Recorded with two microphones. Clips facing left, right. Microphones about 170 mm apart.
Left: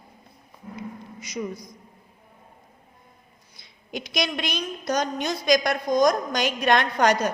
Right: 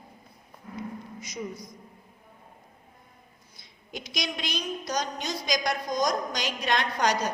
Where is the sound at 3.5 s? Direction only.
70° left (ahead or behind); by 7.3 s 55° left (ahead or behind).